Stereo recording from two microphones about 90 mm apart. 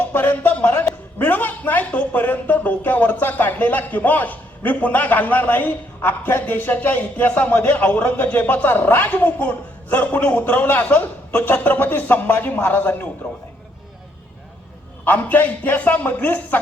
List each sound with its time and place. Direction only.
0.0 s speech: 20° left (ahead or behind)
15.0 s speech: 20° left (ahead or behind)